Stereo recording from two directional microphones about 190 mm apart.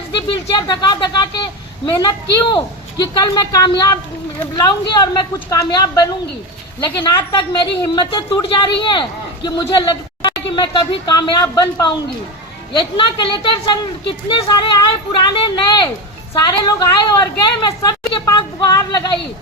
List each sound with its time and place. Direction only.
0.2 s a woman's voice: 25° left (ahead or behind)
7.0 s a woman's voice: 20° left (ahead or behind)